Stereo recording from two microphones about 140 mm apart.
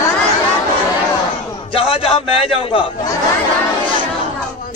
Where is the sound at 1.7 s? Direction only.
40° left (ahead or behind).